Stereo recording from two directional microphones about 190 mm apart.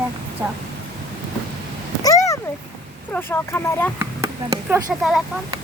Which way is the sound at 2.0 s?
20° left (ahead or behind).